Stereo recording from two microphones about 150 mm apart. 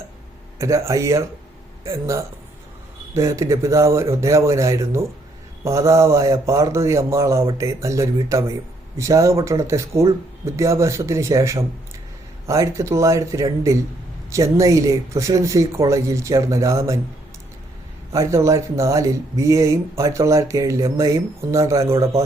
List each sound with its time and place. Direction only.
0.6 s speech: 20° right (ahead or behind)
18.1 s speech: 20° right (ahead or behind)